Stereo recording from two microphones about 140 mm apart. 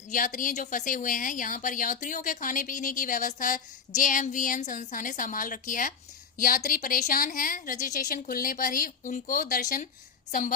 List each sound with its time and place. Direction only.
0.1 s a woman's voice: 65° left (ahead or behind)
6.4 s a woman's voice: 80° left